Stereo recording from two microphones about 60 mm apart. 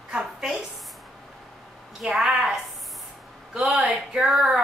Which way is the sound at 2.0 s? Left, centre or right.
Centre.